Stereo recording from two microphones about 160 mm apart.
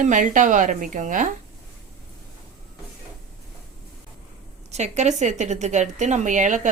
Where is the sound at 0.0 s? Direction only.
55° right (ahead or behind).